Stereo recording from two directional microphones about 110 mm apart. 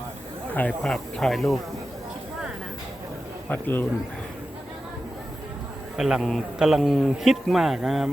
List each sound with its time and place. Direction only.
0.8 s a man's voice: 5° left (ahead or behind)
3.5 s a man's voice: 20° left (ahead or behind)
6.0 s a man's voice: 5° right (ahead or behind)